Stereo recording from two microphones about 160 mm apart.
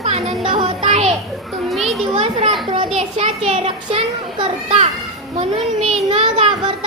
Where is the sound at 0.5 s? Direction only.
40° right (ahead or behind).